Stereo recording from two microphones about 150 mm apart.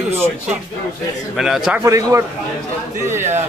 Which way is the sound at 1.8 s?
20° right (ahead or behind).